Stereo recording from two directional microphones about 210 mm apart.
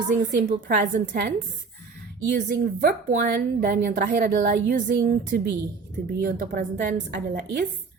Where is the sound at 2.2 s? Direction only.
55° right (ahead or behind).